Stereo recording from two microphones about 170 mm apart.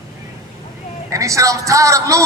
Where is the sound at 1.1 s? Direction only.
20° right (ahead or behind).